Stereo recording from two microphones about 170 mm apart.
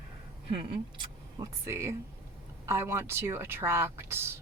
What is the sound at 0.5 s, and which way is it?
Speech, 30° right (ahead or behind).